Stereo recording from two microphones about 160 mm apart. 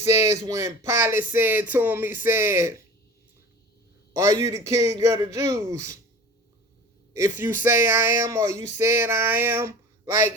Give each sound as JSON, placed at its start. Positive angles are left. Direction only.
{"t": 0.0, "sound": "speech", "side_deg": -15}
{"t": 4.1, "sound": "a man's voice", "side_deg": -20}
{"t": 7.1, "sound": "speech", "side_deg": -15}
{"t": 8.5, "sound": "a sound", "side_deg": 45}
{"t": 8.8, "sound": "speech", "side_deg": -15}